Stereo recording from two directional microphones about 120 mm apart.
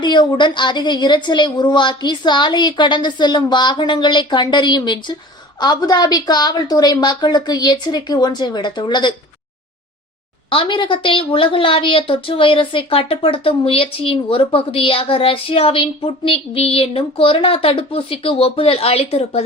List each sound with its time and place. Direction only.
0.0 s a woman's voice: 40° left (ahead or behind)
10.5 s a woman's voice: 45° left (ahead or behind)